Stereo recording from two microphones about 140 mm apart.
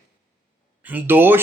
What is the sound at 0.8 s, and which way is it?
Speech, 15° right (ahead or behind).